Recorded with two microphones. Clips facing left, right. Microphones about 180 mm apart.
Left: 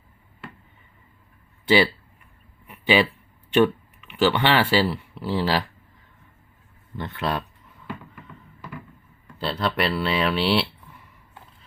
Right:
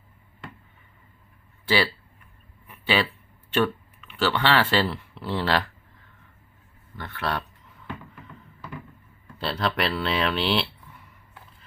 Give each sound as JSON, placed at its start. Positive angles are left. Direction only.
{"t": 1.6, "sound": "speech", "side_deg": 20}
{"t": 2.6, "sound": "a sound", "side_deg": 15}
{"t": 3.5, "sound": "speech", "side_deg": 15}
{"t": 6.9, "sound": "speech", "side_deg": 20}
{"t": 9.4, "sound": "speech", "side_deg": 0}